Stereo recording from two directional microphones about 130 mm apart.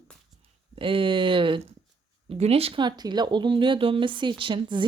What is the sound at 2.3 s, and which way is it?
Speech, 50° right (ahead or behind).